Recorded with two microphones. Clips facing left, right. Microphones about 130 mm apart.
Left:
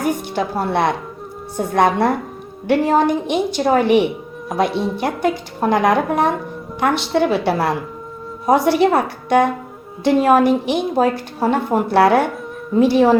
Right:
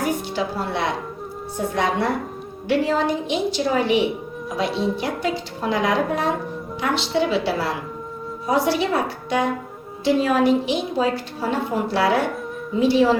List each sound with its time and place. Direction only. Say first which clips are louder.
0.0 s a woman's voice: left 3 dB; 55° left (ahead or behind)